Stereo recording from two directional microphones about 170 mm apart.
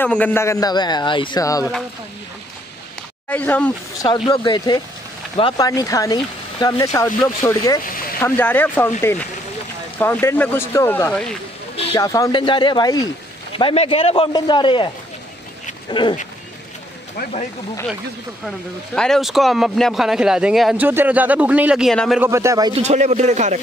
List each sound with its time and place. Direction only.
0.0 s a man's voice: 10° left (ahead or behind)
3.3 s speech: 10° left (ahead or behind)
4.3 s a man's voice: 25° left (ahead or behind)
7.8 s a sound: 55° left (ahead or behind)
8.2 s speech: 10° left (ahead or behind)
9.9 s a man's voice: 10° left (ahead or behind); by 14.9 s 30° left (ahead or behind)
15.9 s a man's voice: 30° left (ahead or behind)
18.9 s speech: centre (ahead or behind)
22.2 s a man's voice: 15° right (ahead or behind)
22.7 s a man's voice: 40° right (ahead or behind)